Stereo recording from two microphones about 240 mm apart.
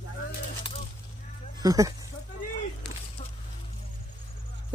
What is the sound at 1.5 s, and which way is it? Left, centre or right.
Speech, centre.